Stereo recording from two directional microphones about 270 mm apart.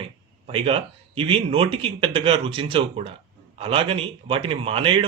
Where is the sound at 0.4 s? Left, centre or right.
Centre.